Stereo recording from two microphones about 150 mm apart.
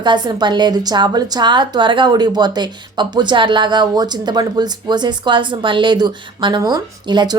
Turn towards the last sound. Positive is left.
turn(degrees=-30)  # may be behind; listen again after turning